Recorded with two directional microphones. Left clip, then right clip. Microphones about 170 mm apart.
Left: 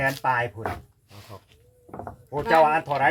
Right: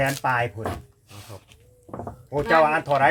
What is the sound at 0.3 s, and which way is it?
Speech, 35° right (ahead or behind).